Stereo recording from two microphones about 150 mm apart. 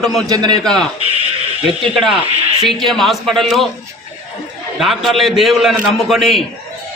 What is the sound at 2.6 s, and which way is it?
A man's voice, centre (ahead or behind).